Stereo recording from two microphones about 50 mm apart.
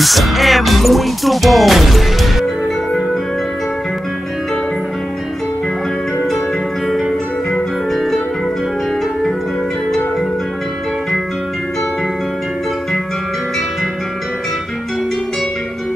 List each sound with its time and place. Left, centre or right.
0.0 s music: centre
7.5 s music: centre